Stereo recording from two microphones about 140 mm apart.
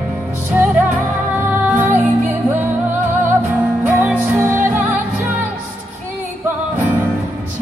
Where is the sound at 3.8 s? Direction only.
15° right (ahead or behind).